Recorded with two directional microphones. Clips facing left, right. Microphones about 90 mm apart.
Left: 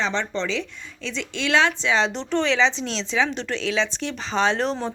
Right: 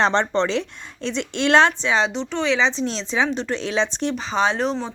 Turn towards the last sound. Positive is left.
turn(degrees=-5)  # may be behind; listen again after turning